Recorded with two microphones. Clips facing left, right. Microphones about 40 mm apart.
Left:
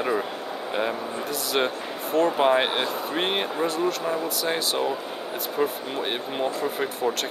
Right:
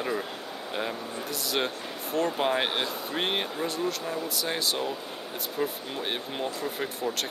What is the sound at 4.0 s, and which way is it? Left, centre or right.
Speech, centre.